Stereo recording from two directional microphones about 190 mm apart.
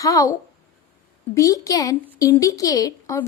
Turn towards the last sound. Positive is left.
turn(degrees=15)  # may be behind; listen again after turning